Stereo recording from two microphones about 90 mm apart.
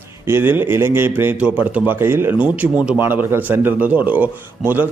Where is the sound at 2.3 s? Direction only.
15° right (ahead or behind).